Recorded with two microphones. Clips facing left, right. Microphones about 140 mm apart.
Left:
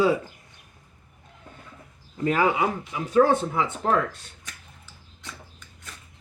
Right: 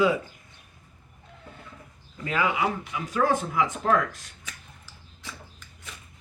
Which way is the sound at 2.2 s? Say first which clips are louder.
Left 4 dB; 40° left (ahead or behind).